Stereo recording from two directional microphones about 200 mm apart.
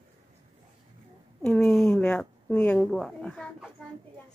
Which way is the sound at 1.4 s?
5° left (ahead or behind).